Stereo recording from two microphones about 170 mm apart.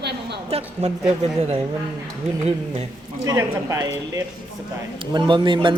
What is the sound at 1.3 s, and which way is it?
Speech, 40° right (ahead or behind).